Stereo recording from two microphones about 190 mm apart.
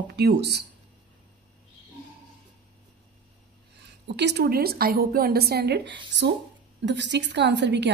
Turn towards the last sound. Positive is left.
turn(degrees=-65)  # may be behind; listen again after turning